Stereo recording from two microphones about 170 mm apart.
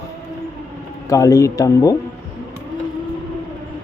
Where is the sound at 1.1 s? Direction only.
20° left (ahead or behind).